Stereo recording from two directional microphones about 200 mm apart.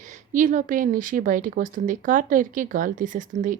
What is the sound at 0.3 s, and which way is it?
A woman's voice, 40° right (ahead or behind).